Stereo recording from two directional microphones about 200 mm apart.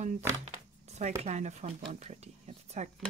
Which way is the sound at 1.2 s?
35° right (ahead or behind).